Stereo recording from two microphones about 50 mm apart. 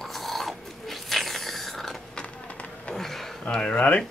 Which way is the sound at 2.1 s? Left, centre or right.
Left.